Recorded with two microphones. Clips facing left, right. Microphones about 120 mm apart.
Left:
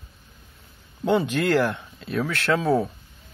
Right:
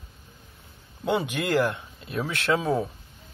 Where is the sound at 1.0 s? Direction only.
10° right (ahead or behind).